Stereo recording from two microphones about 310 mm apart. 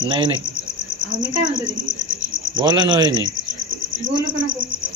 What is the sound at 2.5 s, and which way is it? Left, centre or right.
Cricket, centre.